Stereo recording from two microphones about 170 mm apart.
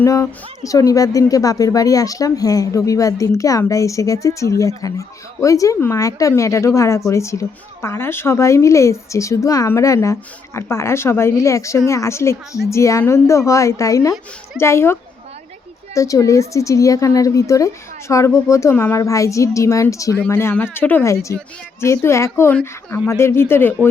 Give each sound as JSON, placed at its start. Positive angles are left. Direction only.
{"t": 0.0, "sound": "speech", "side_deg": 20}
{"t": 16.0, "sound": "speech", "side_deg": 20}